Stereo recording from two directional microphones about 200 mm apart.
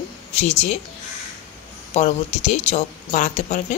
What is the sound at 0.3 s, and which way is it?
Speech, 35° left (ahead or behind).